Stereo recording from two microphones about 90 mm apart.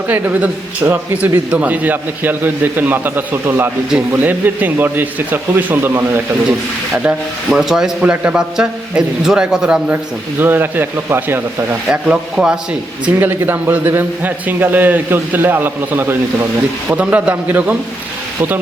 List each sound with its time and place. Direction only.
0.1 s a man's voice: 20° right (ahead or behind)
6.9 s a man's voice: 10° right (ahead or behind)
10.4 s a man's voice: 25° right (ahead or behind)
11.9 s a man's voice: 10° right (ahead or behind)
13.1 s a man's voice: 25° right (ahead or behind)